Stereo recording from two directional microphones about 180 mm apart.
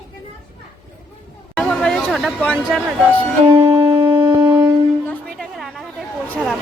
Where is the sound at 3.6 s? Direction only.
15° right (ahead or behind).